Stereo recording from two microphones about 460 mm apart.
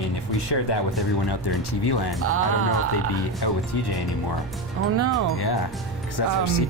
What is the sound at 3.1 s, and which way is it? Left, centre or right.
Speech, left.